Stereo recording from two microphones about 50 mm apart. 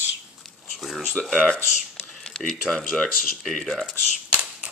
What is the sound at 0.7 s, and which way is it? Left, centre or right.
Speech, centre.